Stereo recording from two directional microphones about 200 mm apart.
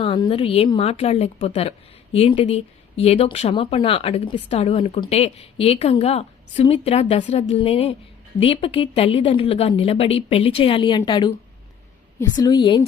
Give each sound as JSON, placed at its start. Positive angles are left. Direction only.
{"t": 0.0, "sound": "speech", "side_deg": 25}
{"t": 12.4, "sound": "speech", "side_deg": 20}